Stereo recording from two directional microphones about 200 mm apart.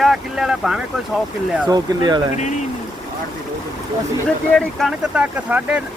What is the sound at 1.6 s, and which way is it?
Speech, 20° right (ahead or behind).